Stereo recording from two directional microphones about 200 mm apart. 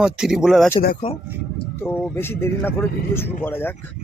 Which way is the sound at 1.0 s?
25° left (ahead or behind).